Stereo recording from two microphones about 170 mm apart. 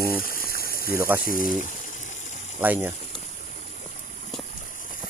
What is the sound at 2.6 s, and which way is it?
Speech, 10° right (ahead or behind).